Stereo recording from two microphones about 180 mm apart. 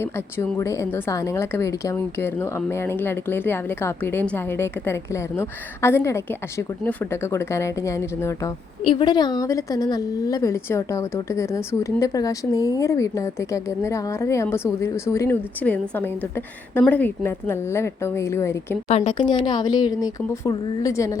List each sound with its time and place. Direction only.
0.0 s a woman's voice: 15° left (ahead or behind)
8.8 s a woman's voice: 25° left (ahead or behind)
18.9 s speech: 35° left (ahead or behind); by 21.2 s 20° left (ahead or behind)